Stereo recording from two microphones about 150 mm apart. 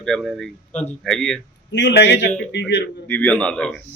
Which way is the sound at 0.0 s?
Centre (ahead or behind).